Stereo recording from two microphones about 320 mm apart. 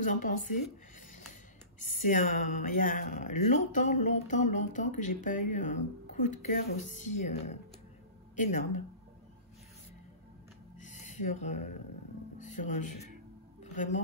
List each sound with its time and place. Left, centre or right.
0.0 s speech: left
2.0 s speech: left
10.8 s a sound: left
12.4 s speech: left